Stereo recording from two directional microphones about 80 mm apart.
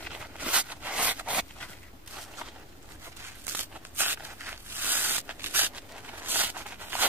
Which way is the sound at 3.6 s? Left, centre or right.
Right.